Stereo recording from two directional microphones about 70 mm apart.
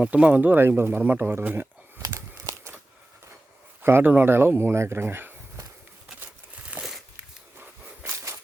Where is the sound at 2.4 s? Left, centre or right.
Right.